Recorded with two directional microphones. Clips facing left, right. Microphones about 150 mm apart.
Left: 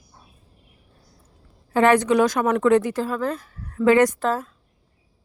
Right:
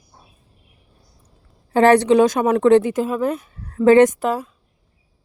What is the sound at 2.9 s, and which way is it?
A woman's voice, 15° right (ahead or behind).